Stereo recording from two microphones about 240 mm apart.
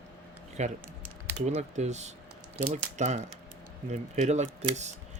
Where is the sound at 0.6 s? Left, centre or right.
Right.